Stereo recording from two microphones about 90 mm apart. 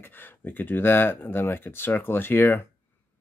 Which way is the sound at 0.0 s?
25° left (ahead or behind).